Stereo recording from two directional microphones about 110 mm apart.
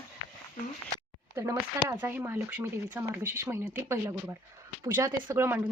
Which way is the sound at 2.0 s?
20° right (ahead or behind).